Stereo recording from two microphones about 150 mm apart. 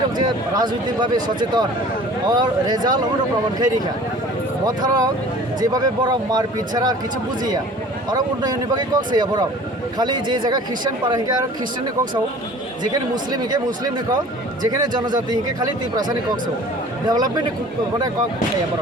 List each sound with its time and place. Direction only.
0.2 s speech: 30° right (ahead or behind)
4.6 s speech: 25° right (ahead or behind)
8.1 s speech: 25° right (ahead or behind)
12.8 s speech: 25° right (ahead or behind)
14.6 s speech: 25° right (ahead or behind)